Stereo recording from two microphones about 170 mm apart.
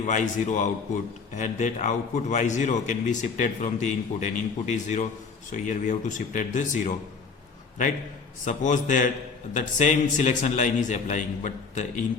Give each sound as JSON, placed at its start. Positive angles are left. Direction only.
{"t": 0.0, "sound": "a man's voice", "side_deg": 45}
{"t": 8.4, "sound": "a man's voice", "side_deg": 45}